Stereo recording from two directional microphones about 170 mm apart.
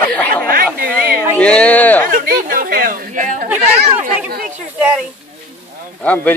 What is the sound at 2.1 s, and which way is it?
Speech, 55° right (ahead or behind).